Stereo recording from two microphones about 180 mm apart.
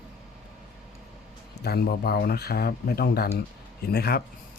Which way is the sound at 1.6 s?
60° left (ahead or behind).